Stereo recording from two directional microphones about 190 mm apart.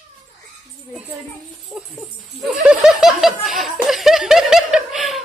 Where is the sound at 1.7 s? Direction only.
Centre (ahead or behind).